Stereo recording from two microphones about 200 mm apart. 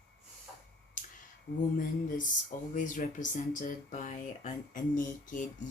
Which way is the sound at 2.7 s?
40° left (ahead or behind).